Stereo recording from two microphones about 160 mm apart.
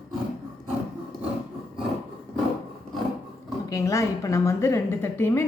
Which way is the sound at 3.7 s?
20° left (ahead or behind).